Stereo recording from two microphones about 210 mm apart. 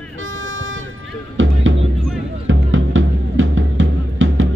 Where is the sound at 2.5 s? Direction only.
65° right (ahead or behind).